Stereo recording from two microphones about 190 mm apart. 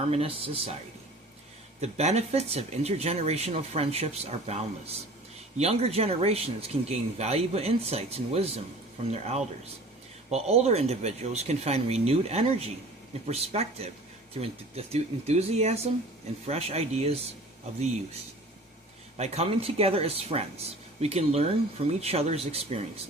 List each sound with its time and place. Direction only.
0.1 s speech: 30° right (ahead or behind)
1.8 s a man's voice: 35° right (ahead or behind)
5.5 s a man's voice: 35° right (ahead or behind)
19.1 s a man's voice: 35° right (ahead or behind)